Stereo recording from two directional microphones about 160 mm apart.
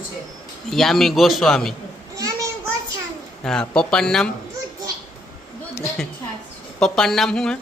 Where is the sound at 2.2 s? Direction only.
20° right (ahead or behind).